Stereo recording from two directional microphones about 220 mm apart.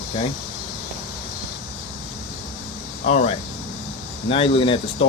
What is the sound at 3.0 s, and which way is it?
Speech, 30° left (ahead or behind).